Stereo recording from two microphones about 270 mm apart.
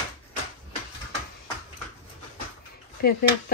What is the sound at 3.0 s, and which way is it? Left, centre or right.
Speech, left.